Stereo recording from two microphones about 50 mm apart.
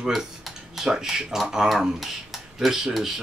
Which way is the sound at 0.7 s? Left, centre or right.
Centre.